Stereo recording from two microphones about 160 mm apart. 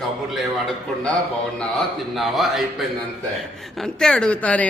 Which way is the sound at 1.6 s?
Centre (ahead or behind).